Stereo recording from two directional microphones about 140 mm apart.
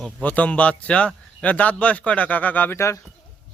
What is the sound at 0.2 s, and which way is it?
A man's voice, 10° left (ahead or behind).